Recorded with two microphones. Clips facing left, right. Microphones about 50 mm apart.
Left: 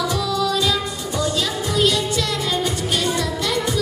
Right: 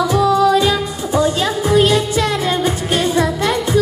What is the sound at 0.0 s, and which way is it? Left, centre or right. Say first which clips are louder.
Music: right 8 dB; right.